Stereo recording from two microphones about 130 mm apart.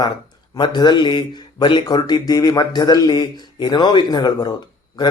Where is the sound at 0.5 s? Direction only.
35° left (ahead or behind).